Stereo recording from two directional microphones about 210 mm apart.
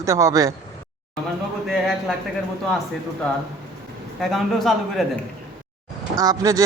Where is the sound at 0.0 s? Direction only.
15° right (ahead or behind).